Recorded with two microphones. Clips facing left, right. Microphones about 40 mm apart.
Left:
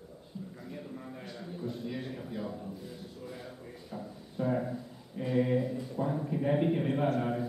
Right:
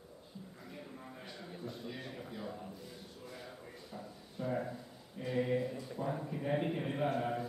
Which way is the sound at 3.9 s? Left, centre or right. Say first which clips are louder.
Left 9 dB; left.